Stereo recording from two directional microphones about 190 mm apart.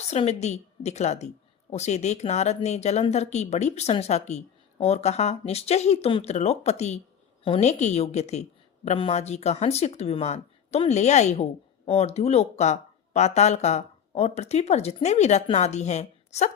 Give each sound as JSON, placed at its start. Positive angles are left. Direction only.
{"t": 0.1, "sound": "speech", "side_deg": 35}